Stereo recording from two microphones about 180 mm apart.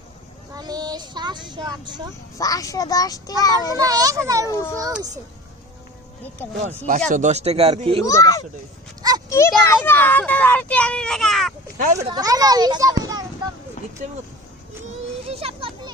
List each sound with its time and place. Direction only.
0.5 s vehicle: 20° right (ahead or behind)
2.4 s a child's voice: 20° left (ahead or behind)
3.8 s a child's voice: 20° right (ahead or behind)
4.4 s a child's voice: 15° left (ahead or behind)
6.6 s speech: 45° right (ahead or behind)
8.0 s a child's voice: 20° left (ahead or behind)
9.0 s a sound: 20° right (ahead or behind)
9.3 s a child's voice: 15° left (ahead or behind)
12.0 s a child's voice: 20° right (ahead or behind)
15.3 s children playing: 35° right (ahead or behind)